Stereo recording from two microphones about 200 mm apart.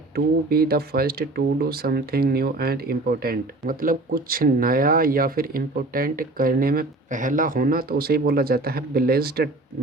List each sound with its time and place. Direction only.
0.5 s speech: 50° right (ahead or behind)